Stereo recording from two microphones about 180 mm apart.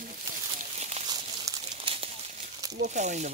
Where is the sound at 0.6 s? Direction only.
40° right (ahead or behind).